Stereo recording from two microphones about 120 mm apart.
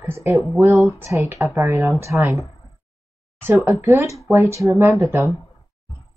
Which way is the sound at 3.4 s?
15° right (ahead or behind).